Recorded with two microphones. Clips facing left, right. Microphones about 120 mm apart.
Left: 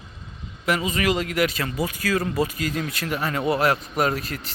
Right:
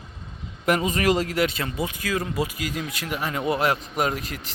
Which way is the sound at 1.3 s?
25° right (ahead or behind).